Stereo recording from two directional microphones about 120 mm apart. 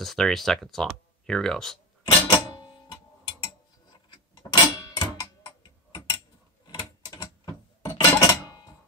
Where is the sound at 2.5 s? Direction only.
35° left (ahead or behind).